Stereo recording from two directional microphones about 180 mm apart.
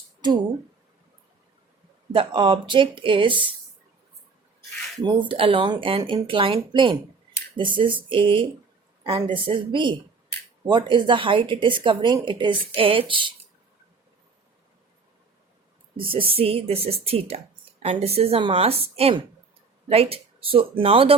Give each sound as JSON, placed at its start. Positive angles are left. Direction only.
{"t": 2.1, "sound": "speech", "side_deg": -30}
{"t": 5.3, "sound": "speech", "side_deg": -30}
{"t": 16.0, "sound": "speech", "side_deg": -30}